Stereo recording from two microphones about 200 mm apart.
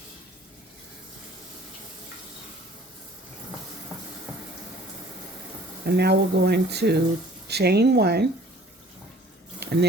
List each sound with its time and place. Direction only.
4.3 s water tap: 5° right (ahead or behind)
5.8 s speech: 55° right (ahead or behind)
9.6 s a sound: 55° right (ahead or behind)